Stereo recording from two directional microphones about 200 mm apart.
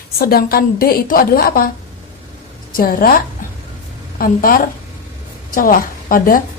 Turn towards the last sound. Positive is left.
turn(degrees=45)  # may be behind; listen again after turning